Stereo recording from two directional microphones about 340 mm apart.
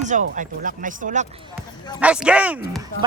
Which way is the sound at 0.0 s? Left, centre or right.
Right.